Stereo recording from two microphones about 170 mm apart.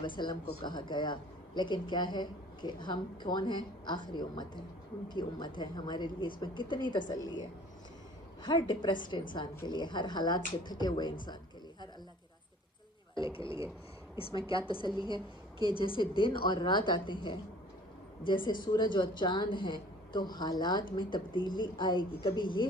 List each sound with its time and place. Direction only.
0.0 s speech: 25° left (ahead or behind)
13.1 s speech: 30° left (ahead or behind)